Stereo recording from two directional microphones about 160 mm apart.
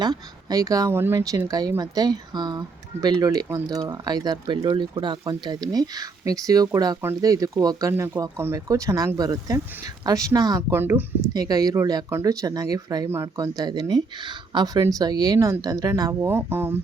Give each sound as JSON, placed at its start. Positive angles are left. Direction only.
{"t": 0.0, "sound": "speech", "side_deg": -25}